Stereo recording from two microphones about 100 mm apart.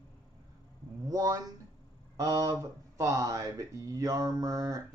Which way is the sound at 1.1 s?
35° right (ahead or behind).